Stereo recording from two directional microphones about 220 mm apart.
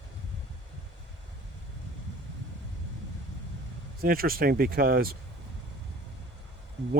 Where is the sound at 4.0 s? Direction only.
40° right (ahead or behind).